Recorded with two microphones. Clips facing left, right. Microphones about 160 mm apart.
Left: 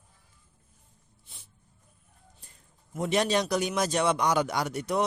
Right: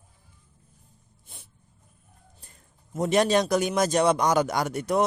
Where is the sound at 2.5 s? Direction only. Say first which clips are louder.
Right 4 dB; 45° right (ahead or behind).